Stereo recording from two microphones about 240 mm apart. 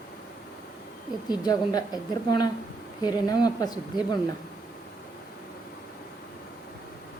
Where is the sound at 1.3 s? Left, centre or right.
Centre.